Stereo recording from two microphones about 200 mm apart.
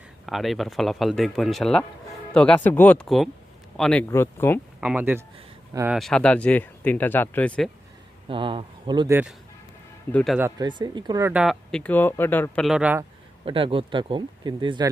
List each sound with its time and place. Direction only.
0.3 s speech: centre (ahead or behind)
4.8 s speech: 10° right (ahead or behind)
5.9 s speech: centre (ahead or behind)
8.3 s speech: 25° right (ahead or behind)
10.1 s speech: 5° left (ahead or behind)
10.6 s speech: 20° right (ahead or behind)
11.3 s speech: 5° right (ahead or behind)
13.4 s speech: 25° right (ahead or behind)